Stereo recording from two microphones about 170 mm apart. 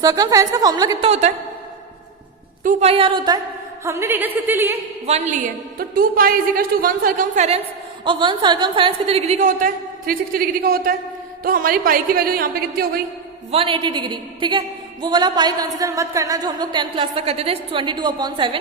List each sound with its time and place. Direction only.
0.0 s a woman's voice: 20° right (ahead or behind)
1.0 s a woman's voice: 40° right (ahead or behind)
2.8 s a woman's voice: 35° right (ahead or behind)
3.8 s a woman's voice: 15° right (ahead or behind)
5.0 s a woman's voice: 40° right (ahead or behind)
5.9 s speech: 60° right (ahead or behind)
8.0 s a woman's voice: 30° right (ahead or behind); by 12.8 s 60° right (ahead or behind)
13.5 s a woman's voice: 30° right (ahead or behind)